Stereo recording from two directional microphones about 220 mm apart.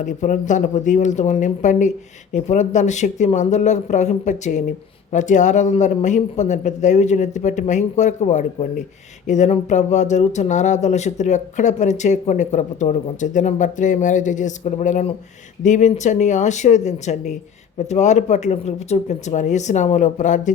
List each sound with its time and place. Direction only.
0.0 s speech: 35° left (ahead or behind)